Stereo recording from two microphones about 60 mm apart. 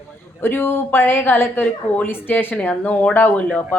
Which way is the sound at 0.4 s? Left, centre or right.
Left.